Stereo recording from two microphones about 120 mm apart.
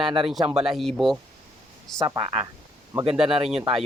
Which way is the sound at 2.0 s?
40° right (ahead or behind).